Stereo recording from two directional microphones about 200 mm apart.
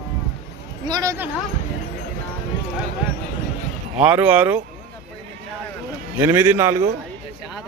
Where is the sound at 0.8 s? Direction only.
20° right (ahead or behind).